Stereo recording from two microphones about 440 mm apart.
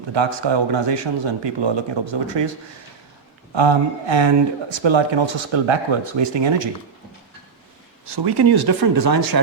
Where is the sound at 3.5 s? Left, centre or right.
Right.